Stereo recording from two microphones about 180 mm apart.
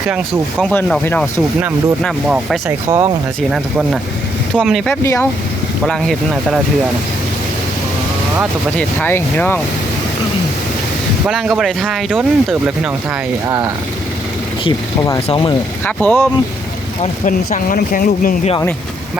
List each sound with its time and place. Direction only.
0.6 s speech: 5° left (ahead or behind)
2.0 s speech: centre (ahead or behind)
4.5 s speech: 5° right (ahead or behind)
4.9 s speech: 15° left (ahead or behind)
5.8 s speech: centre (ahead or behind)
9.0 s speech: 10° left (ahead or behind)
11.3 s speech: centre (ahead or behind)
14.6 s speech: 20° left (ahead or behind)
16.0 s speech: 10° left (ahead or behind)
17.0 s speech: 45° left (ahead or behind)